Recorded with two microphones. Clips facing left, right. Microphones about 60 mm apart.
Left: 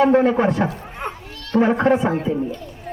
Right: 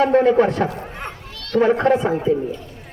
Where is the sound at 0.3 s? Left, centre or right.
Centre.